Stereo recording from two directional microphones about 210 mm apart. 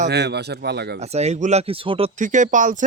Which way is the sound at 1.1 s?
30° right (ahead or behind).